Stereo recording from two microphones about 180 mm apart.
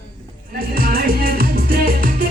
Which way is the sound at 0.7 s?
55° right (ahead or behind).